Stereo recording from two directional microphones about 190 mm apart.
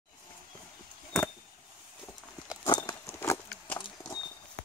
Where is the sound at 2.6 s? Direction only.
20° left (ahead or behind).